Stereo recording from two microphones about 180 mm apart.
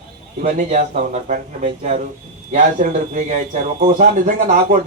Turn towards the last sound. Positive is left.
turn(degrees=-45)  # may be behind; listen again after turning